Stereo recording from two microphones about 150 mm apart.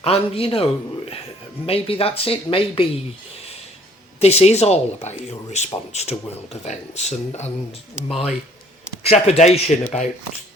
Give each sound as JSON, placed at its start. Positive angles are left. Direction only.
{"t": 0.0, "sound": "a man's voice", "side_deg": 40}
{"t": 4.2, "sound": "speech", "side_deg": 45}